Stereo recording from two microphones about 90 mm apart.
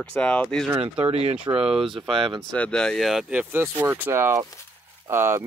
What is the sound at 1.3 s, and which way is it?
Speech, 80° right.